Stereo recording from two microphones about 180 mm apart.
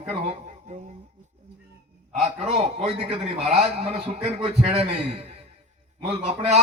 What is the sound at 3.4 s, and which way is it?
Speech, 5° right (ahead or behind).